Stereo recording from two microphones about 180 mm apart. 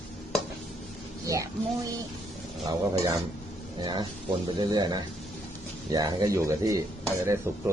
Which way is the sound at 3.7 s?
25° right (ahead or behind).